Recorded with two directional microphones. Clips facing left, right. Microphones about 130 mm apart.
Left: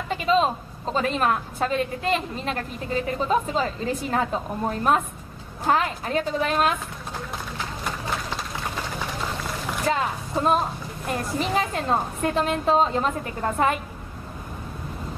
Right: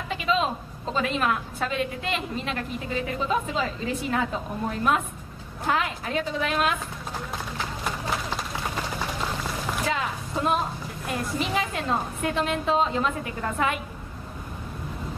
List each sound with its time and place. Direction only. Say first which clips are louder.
0.1 s a woman's voice: left 4 dB; 40° left (ahead or behind)
9.8 s a woman's voice: left 4 dB; 40° left (ahead or behind)